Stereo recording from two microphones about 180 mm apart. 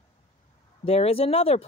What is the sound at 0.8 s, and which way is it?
Speech, 35° left (ahead or behind).